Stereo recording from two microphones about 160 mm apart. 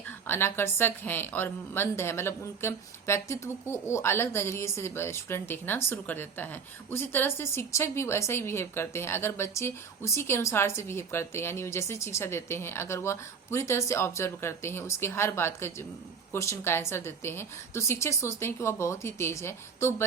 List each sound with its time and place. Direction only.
0.3 s a woman's voice: 15° left (ahead or behind)